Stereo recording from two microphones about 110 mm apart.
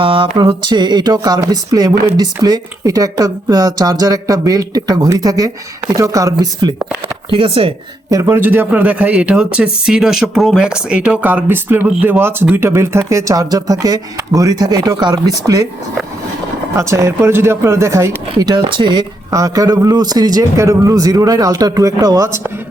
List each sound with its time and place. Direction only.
0.0 s speech: 50° right (ahead or behind)
7.3 s speech: 55° right (ahead or behind)
8.1 s a man's voice: 20° right (ahead or behind)
16.7 s speech: 25° right (ahead or behind); by 19.0 s 45° right (ahead or behind)
19.3 s speech: 30° right (ahead or behind)